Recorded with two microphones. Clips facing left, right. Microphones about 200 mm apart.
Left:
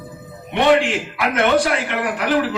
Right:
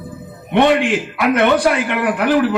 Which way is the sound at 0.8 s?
55° right (ahead or behind).